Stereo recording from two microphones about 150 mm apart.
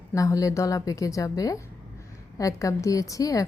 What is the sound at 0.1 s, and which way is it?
Speech, 20° left (ahead or behind).